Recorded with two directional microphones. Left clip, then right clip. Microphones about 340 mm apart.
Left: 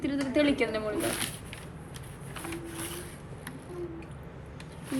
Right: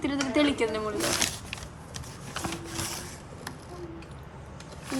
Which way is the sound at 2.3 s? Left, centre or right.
Right.